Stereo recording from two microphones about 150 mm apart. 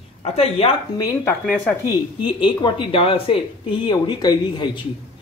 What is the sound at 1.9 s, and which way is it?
Speech, 30° left (ahead or behind).